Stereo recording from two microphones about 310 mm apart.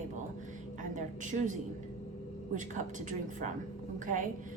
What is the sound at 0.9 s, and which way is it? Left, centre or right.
Speech, right.